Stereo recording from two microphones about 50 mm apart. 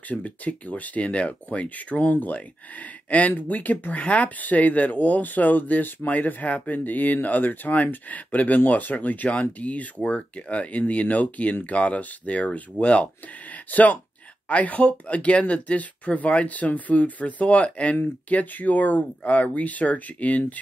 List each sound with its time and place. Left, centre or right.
0.1 s speech: left